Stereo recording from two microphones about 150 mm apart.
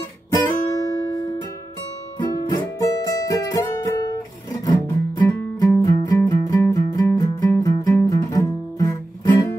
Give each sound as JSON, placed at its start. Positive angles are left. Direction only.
{"t": 0.3, "sound": "guitar", "side_deg": 20}
{"t": 2.1, "sound": "music", "side_deg": 25}